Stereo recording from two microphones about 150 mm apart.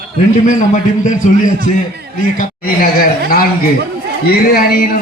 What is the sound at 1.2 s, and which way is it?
Speech, 50° left (ahead or behind).